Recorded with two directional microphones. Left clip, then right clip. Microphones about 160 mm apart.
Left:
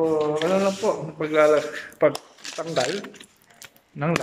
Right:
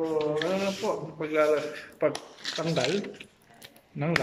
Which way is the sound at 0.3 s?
10° left (ahead or behind).